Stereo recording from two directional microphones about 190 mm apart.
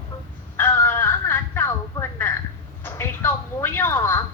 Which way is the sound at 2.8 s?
10° left (ahead or behind).